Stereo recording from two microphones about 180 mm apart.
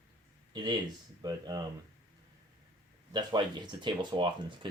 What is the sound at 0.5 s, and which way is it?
Speech, 25° right (ahead or behind).